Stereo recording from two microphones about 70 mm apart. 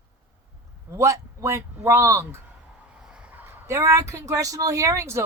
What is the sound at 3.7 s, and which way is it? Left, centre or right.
Speech, right.